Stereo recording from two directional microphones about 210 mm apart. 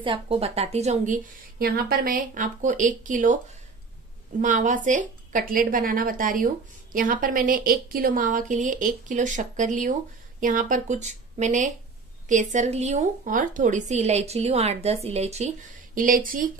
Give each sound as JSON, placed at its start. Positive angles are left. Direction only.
{"t": 0.0, "sound": "speech", "side_deg": -25}